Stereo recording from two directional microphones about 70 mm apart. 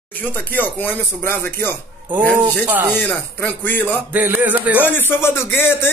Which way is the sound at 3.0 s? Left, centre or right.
Left.